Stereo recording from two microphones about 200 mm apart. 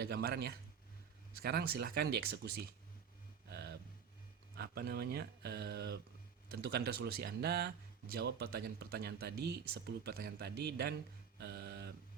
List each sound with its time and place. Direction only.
0.0 s speech: 50° right (ahead or behind)
4.5 s speech: 50° right (ahead or behind)
11.3 s a sound: 55° right (ahead or behind)